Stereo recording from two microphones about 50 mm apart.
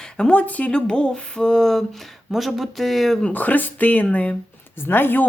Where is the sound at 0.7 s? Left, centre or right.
Centre.